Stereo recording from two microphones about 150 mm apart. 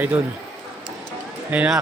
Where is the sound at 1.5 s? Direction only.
10° right (ahead or behind).